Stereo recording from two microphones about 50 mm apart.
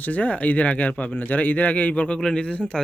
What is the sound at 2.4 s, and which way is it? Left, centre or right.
Speech, left.